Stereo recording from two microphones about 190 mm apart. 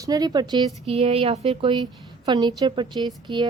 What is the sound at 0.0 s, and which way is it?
Speech, 20° right (ahead or behind).